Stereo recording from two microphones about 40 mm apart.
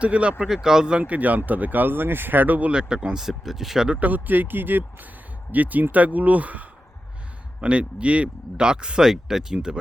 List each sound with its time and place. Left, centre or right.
0.0 s speech: right
0.4 s speech: centre
0.9 s speech: right
2.7 s speech: right
3.2 s speech: centre
4.0 s speech: right
5.5 s speech: right; by 9.6 s centre